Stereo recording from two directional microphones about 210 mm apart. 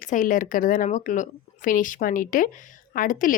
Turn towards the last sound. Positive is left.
turn(degrees=40)  # may be behind; listen again after turning